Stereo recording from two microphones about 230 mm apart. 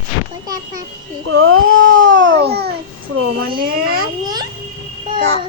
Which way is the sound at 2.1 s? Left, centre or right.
Right.